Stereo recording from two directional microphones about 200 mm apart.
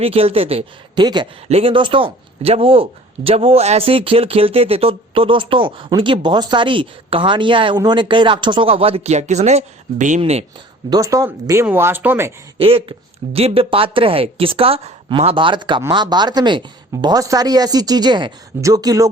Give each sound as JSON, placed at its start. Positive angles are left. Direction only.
{"t": 0.0, "sound": "speech", "side_deg": -30}
{"t": 10.8, "sound": "speech", "side_deg": -20}
{"t": 12.5, "sound": "speech", "side_deg": -25}